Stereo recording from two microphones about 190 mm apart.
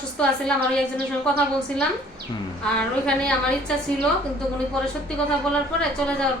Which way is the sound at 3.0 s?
5° left (ahead or behind).